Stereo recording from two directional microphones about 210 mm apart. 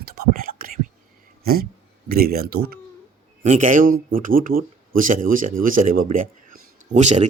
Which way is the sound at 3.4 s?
35° right (ahead or behind).